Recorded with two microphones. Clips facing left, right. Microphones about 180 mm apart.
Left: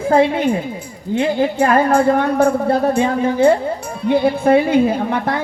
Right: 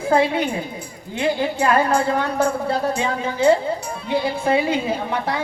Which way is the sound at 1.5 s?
50° left (ahead or behind).